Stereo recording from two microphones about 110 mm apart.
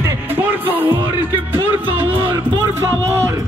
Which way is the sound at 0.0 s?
20° right (ahead or behind).